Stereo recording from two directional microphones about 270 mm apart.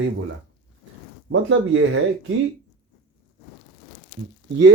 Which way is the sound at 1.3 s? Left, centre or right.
Right.